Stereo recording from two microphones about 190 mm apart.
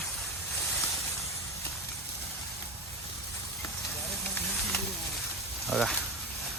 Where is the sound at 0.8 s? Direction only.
15° left (ahead or behind).